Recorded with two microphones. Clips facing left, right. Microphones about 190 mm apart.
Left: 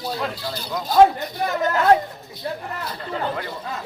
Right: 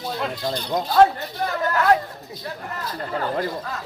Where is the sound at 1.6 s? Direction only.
20° left (ahead or behind).